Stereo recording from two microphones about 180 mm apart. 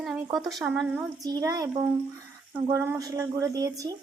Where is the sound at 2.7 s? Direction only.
15° right (ahead or behind).